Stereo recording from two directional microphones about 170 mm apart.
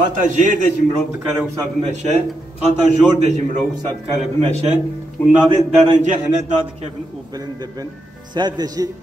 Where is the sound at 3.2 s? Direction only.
40° right (ahead or behind).